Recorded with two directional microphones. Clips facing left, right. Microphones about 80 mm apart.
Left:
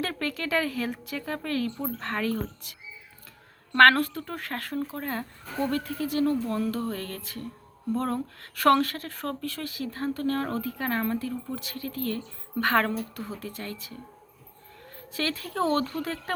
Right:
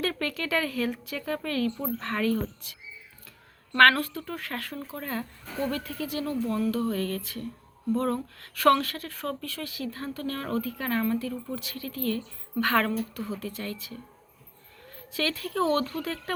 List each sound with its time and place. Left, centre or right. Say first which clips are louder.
0.0 s speech: right 1 dB; left
3.8 s speech: left 2 dB; left
15.1 s speech: right 1 dB; left